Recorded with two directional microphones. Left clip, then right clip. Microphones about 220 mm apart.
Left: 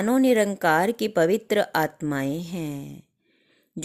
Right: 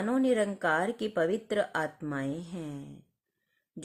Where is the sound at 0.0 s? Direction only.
35° left (ahead or behind).